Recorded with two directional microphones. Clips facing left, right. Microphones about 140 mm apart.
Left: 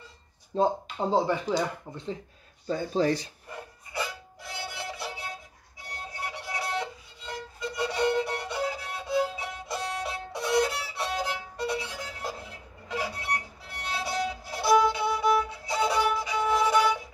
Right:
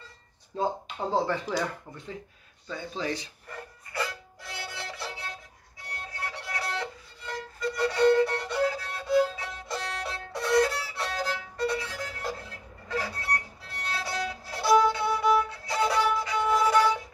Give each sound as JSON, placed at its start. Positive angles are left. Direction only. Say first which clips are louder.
{"t": 0.5, "sound": "speech", "louder": "left 4 dB", "side_deg": 25}
{"t": 2.6, "sound": "speech", "louder": "left 8 dB", "side_deg": 40}
{"t": 3.4, "sound": "music", "louder": "left 1 dB", "side_deg": 15}
{"t": 5.9, "sound": "violin", "louder": "left 1 dB", "side_deg": 15}